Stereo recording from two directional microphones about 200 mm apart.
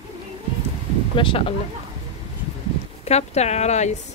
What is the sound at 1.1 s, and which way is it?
Speech, 25° left (ahead or behind).